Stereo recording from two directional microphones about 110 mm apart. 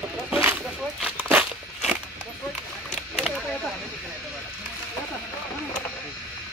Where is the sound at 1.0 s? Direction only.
10° right (ahead or behind).